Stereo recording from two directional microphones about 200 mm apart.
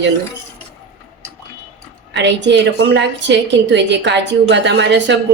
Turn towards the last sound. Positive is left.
turn(degrees=-60)  # may be behind; listen again after turning